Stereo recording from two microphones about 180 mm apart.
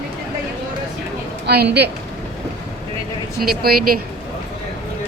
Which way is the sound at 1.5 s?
65° right (ahead or behind).